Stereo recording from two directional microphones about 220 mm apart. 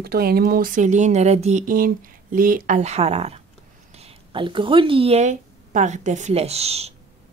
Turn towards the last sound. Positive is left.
turn(degrees=-30)  # may be behind; listen again after turning